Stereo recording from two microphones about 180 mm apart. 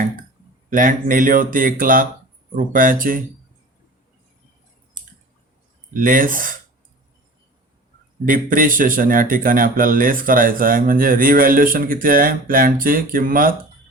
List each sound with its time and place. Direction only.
0.7 s speech: 50° right (ahead or behind)
5.9 s speech: 50° right (ahead or behind)
8.2 s speech: 50° right (ahead or behind)